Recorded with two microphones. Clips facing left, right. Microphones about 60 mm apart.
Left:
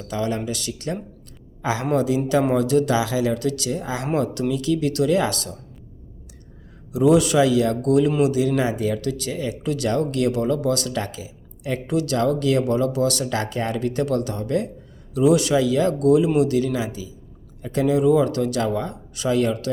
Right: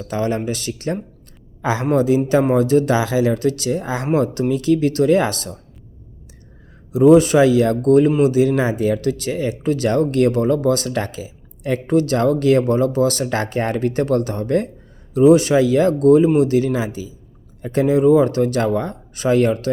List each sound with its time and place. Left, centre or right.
0.1 s speech: right
6.9 s speech: right